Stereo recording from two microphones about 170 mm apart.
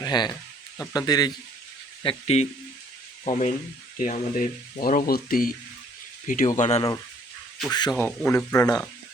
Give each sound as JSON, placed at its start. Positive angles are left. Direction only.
{"t": 0.0, "sound": "speech", "side_deg": 25}
{"t": 2.0, "sound": "speech", "side_deg": 40}
{"t": 7.7, "sound": "speech", "side_deg": 25}